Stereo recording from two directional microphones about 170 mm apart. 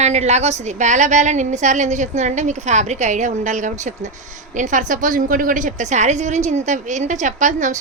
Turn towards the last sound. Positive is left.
turn(degrees=-45)  # may be behind; listen again after turning